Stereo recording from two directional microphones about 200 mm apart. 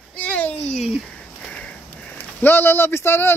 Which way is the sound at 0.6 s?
30° left (ahead or behind).